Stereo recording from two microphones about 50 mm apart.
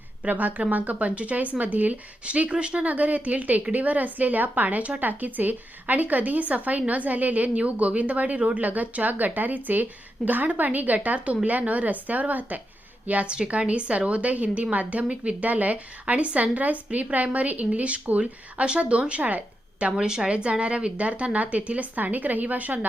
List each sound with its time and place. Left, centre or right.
0.3 s speech: right
13.3 s speech: right
20.0 s speech: centre; by 22.9 s right